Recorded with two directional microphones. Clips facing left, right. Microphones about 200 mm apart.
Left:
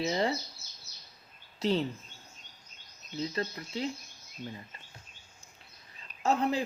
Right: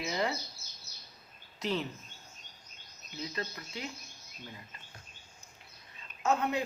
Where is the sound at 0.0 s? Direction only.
30° left (ahead or behind).